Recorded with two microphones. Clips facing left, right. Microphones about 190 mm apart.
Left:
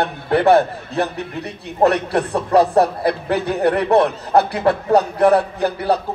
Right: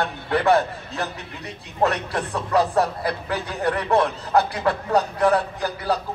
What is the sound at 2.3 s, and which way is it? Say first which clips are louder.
Speech: left 6 dB; 35° left (ahead or behind).